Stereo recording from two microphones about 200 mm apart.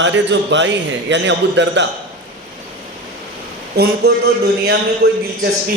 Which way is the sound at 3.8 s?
55° right (ahead or behind).